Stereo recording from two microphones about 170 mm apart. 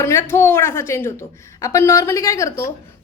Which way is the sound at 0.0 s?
15° left (ahead or behind).